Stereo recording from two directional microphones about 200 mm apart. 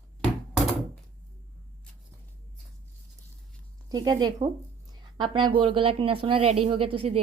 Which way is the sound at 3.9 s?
20° right (ahead or behind).